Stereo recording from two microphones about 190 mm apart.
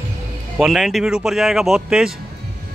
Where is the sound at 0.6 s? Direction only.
Centre (ahead or behind).